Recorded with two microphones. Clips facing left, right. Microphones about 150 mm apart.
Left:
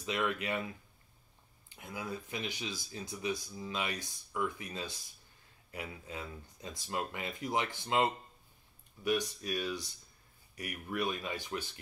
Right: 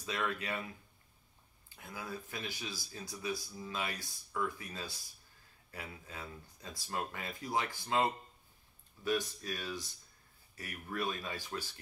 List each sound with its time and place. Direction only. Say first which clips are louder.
0.0 s speech: left 3 dB; 20° left (ahead or behind)
1.8 s speech: left 3 dB; 20° left (ahead or behind)